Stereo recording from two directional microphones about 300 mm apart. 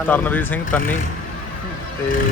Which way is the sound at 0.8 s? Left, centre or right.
Left.